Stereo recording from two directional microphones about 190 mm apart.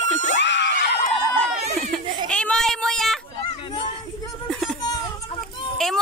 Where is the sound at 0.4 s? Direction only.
70° left (ahead or behind).